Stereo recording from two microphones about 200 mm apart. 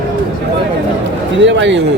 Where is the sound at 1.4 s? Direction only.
65° right (ahead or behind).